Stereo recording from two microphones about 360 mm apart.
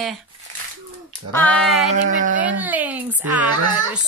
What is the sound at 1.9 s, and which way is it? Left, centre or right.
Speech, right.